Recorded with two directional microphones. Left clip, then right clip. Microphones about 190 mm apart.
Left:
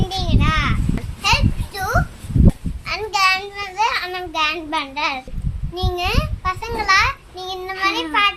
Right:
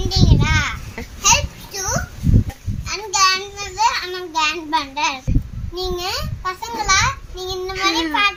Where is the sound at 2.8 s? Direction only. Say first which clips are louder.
Even; 20° left (ahead or behind).